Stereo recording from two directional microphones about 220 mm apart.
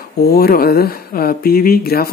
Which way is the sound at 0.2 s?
45° left (ahead or behind).